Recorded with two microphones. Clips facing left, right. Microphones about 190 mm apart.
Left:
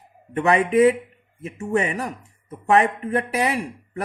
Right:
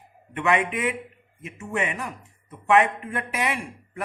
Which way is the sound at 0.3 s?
35° left (ahead or behind).